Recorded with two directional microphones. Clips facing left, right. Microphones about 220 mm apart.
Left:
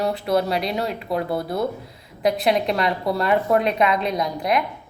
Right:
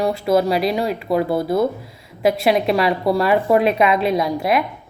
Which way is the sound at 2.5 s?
5° right (ahead or behind).